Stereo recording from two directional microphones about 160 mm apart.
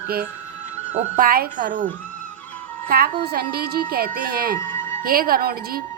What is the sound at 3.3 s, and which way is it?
A woman's voice, 70° right (ahead or behind).